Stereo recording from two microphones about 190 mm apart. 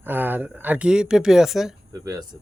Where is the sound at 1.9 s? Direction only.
15° right (ahead or behind).